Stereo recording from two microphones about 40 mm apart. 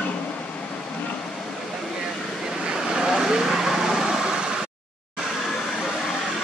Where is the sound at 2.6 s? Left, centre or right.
Centre.